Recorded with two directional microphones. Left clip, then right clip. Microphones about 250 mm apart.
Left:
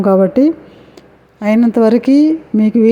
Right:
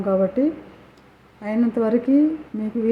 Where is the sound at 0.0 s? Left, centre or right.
Left.